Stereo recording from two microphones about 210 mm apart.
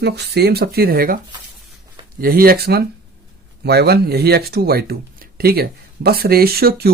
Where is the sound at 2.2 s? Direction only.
45° right (ahead or behind).